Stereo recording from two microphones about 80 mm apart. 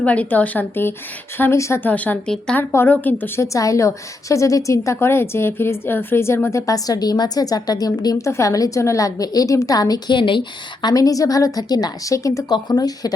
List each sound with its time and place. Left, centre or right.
0.0 s a woman's voice: centre
1.4 s a woman's voice: left
1.8 s a woman's voice: left
2.2 s a woman's voice: centre
2.6 s a woman's voice: left
3.4 s a woman's voice: left
6.7 s a woman's voice: left
8.1 s a woman's voice: left
10.2 s speech: left
10.8 s a woman's voice: left
12.5 s speech: left